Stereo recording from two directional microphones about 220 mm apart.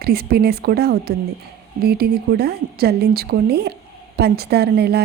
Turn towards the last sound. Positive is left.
turn(degrees=-45)  # may be behind; listen again after turning